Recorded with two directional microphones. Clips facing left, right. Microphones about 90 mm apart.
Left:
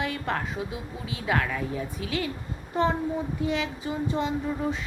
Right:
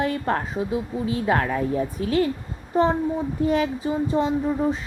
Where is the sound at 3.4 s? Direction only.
45° right (ahead or behind).